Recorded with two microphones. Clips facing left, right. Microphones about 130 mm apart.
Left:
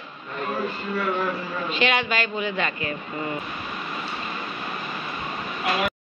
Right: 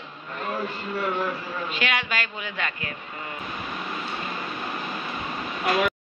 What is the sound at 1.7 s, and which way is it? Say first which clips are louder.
Speech: left 5 dB; 5° right (ahead or behind).